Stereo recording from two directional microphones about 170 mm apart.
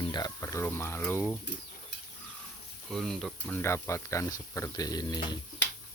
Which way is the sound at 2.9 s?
Centre (ahead or behind).